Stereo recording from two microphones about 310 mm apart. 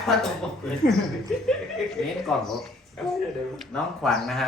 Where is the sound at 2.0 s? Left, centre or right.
Centre.